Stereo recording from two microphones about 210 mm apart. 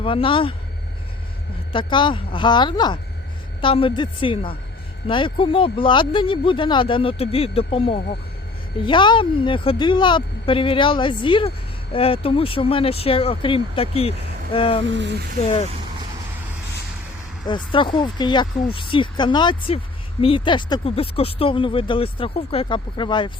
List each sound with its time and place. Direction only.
0.0 s speech: 25° left (ahead or behind)
1.7 s speech: 25° left (ahead or behind)
14.8 s speech: 60° right (ahead or behind)
15.4 s speech: 30° left (ahead or behind)
17.4 s speech: 25° left (ahead or behind)